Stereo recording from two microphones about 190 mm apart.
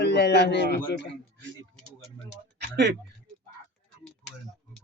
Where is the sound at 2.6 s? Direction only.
65° right (ahead or behind).